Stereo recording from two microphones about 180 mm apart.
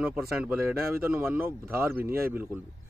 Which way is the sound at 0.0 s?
5° right (ahead or behind).